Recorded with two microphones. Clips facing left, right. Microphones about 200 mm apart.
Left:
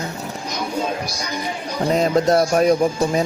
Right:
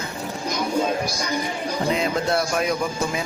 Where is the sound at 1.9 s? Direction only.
40° left (ahead or behind).